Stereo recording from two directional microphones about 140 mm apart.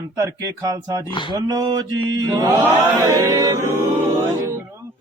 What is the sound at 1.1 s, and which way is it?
Speech, 35° left (ahead or behind).